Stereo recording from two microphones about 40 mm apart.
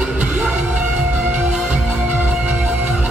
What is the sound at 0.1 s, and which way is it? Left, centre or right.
Music, right.